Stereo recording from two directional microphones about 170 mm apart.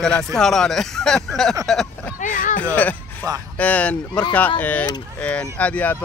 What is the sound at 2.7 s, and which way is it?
Speech, 10° left (ahead or behind).